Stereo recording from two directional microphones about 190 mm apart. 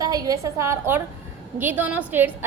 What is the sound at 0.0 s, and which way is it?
A woman's voice, 20° right (ahead or behind).